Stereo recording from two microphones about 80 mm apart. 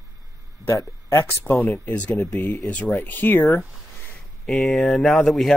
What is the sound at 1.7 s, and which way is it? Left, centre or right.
Speech, centre.